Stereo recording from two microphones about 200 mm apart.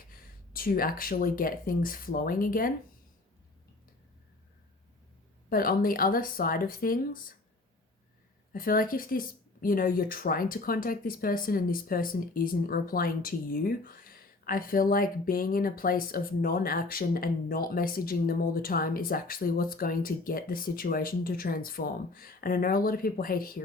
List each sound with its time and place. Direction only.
0.1 s speech: 45° left (ahead or behind)
5.5 s speech: 45° left (ahead or behind)
8.5 s speech: 45° left (ahead or behind)